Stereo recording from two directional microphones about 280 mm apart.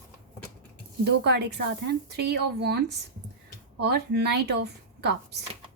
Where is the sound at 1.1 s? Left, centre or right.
Right.